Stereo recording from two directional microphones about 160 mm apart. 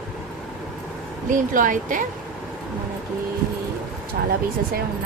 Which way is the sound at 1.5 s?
55° right (ahead or behind).